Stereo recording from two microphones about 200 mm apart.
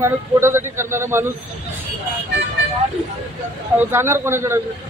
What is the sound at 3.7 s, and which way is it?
Speech, 10° right (ahead or behind).